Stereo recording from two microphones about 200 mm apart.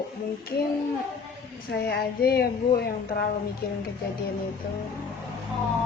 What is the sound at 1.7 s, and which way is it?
Speech, 55° left (ahead or behind).